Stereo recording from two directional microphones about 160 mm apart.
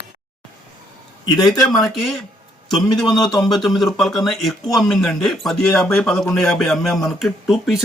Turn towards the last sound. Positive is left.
turn(degrees=0)  # may be behind; listen again after turning